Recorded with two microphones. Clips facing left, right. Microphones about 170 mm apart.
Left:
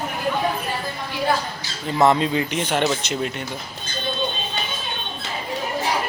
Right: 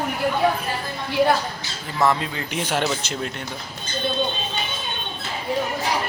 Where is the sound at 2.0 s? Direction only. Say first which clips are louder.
Left 4 dB; 20° left (ahead or behind).